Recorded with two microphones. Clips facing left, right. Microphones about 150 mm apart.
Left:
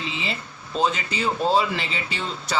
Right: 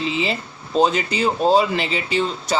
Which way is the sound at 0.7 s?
35° right (ahead or behind).